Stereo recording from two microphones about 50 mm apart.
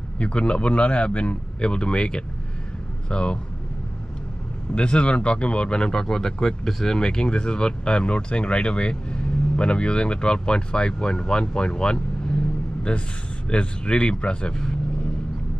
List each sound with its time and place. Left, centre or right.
0.2 s a man's voice: left
4.7 s a man's voice: left